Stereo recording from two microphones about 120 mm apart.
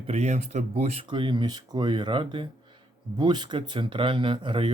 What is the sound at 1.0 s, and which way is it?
Speech, 45° right (ahead or behind).